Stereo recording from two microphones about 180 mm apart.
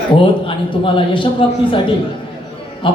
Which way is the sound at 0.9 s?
30° left (ahead or behind).